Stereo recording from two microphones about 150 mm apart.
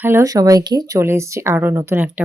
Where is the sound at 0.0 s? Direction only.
20° right (ahead or behind).